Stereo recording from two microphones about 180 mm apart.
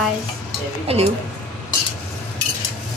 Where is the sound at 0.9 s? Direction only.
35° right (ahead or behind).